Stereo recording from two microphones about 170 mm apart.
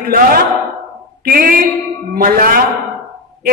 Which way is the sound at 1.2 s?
55° right (ahead or behind).